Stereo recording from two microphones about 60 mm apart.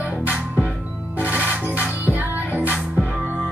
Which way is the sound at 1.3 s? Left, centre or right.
Right.